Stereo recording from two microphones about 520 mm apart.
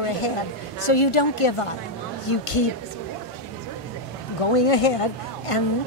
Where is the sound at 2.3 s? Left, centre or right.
Left.